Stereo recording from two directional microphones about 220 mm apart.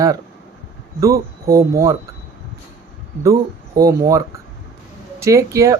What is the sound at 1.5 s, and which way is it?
Speech, 15° right (ahead or behind).